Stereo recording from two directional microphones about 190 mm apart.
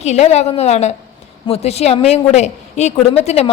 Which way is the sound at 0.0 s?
35° left (ahead or behind).